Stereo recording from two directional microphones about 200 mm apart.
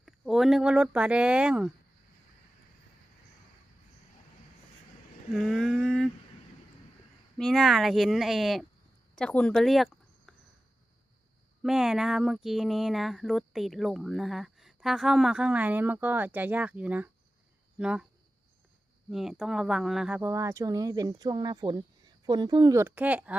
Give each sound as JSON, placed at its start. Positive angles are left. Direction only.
{"t": 0.0, "sound": "speech", "side_deg": 0}
{"t": 5.3, "sound": "a sound", "side_deg": 0}
{"t": 7.3, "sound": "speech", "side_deg": 0}
{"t": 11.6, "sound": "speech", "side_deg": 0}
{"t": 19.1, "sound": "speech", "side_deg": 0}